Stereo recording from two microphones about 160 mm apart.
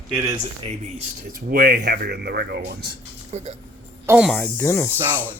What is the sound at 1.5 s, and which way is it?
Speech, 70° right (ahead or behind).